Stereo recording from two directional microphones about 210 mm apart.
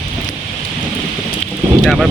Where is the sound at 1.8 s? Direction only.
Centre (ahead or behind).